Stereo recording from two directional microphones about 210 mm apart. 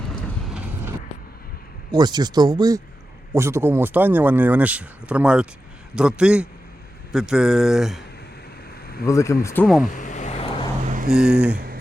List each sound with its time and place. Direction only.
0.5 s vehicle: 5° right (ahead or behind)
1.9 s speech: 20° right (ahead or behind); by 8.0 s centre (ahead or behind)
9.0 s speech: 15° left (ahead or behind)
9.6 s speech: centre (ahead or behind)
9.9 s vehicle: 35° left (ahead or behind)
10.8 s vehicle: 40° right (ahead or behind)
11.1 s speech: 5° right (ahead or behind)